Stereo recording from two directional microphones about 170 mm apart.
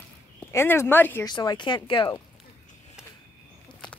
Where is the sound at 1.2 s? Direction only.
25° left (ahead or behind).